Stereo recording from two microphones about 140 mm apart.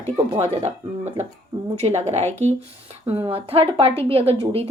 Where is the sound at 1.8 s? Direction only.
50° right (ahead or behind).